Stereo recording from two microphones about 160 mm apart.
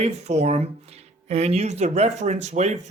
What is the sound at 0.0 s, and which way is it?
Speech, 45° right (ahead or behind).